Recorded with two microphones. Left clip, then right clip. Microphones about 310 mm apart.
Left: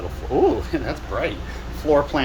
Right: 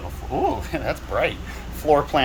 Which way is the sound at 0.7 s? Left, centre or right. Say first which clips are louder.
Right 1 dB; centre.